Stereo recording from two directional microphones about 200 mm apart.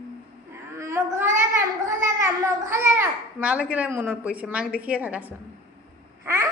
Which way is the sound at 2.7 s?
10° right (ahead or behind).